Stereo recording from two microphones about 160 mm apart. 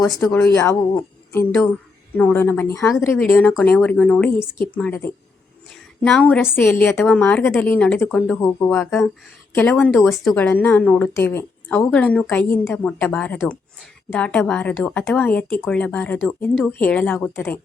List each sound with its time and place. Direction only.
0.3 s a woman's voice: 20° left (ahead or behind)
10.0 s a woman's voice: 15° left (ahead or behind)